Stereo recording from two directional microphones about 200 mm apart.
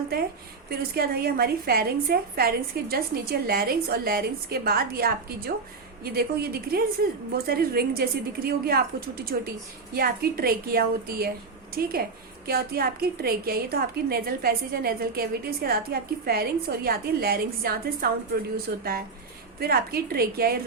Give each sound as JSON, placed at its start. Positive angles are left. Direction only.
{"t": 0.7, "sound": "a woman's voice", "side_deg": -50}